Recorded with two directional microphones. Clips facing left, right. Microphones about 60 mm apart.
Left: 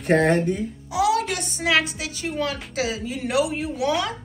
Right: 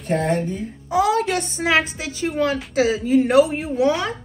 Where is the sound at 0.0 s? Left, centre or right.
Left.